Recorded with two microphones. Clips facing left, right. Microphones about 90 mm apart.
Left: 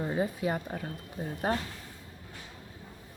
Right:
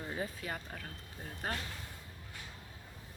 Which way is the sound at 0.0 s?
30° left (ahead or behind).